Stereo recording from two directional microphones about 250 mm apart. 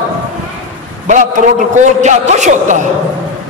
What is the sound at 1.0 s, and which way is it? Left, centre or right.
A man's voice, right.